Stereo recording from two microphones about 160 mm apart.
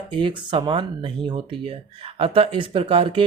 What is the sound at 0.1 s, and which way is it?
Speech, 30° right (ahead or behind).